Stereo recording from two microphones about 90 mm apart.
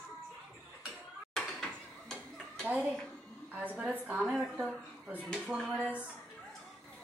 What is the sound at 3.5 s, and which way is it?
Speech, 15° right (ahead or behind).